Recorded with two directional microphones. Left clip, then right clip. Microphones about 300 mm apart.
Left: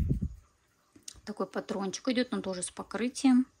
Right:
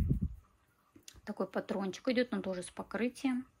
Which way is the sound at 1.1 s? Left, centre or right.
Centre.